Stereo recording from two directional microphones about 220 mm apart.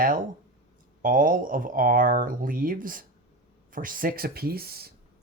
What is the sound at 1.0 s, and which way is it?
Speech, 40° right (ahead or behind).